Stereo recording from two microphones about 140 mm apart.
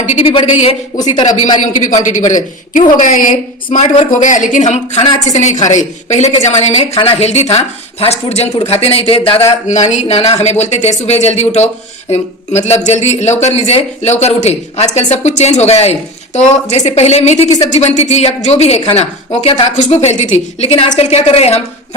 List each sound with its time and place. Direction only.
0.0 s a man's voice: 55° left (ahead or behind)
0.3 s a man's voice: 40° left (ahead or behind)
0.9 s speech: 30° left (ahead or behind)
2.0 s speech: 65° left (ahead or behind)
2.9 s a woman's voice: 75° left (ahead or behind)
3.8 s speech: 55° left (ahead or behind); by 9.4 s 40° left (ahead or behind)
9.6 s speech: 55° left (ahead or behind)